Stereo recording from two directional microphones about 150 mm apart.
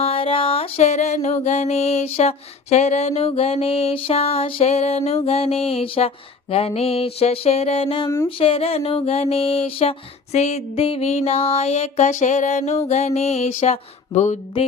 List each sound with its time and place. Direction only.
0.0 s music: 40° left (ahead or behind)
6.5 s a sound: 40° left (ahead or behind)
10.3 s music: 45° left (ahead or behind)